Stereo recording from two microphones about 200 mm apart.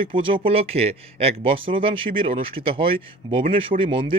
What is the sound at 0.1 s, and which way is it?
A man's voice, 25° right (ahead or behind).